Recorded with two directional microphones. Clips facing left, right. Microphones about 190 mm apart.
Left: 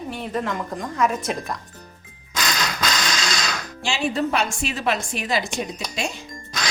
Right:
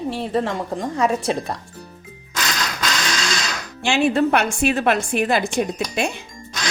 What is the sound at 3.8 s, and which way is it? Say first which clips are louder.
A woman's voice: right 6 dB; 60° right (ahead or behind).